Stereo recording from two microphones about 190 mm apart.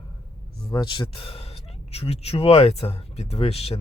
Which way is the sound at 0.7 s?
20° left (ahead or behind).